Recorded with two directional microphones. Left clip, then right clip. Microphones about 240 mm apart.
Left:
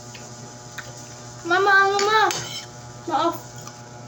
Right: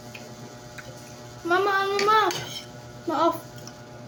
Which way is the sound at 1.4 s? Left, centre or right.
Centre.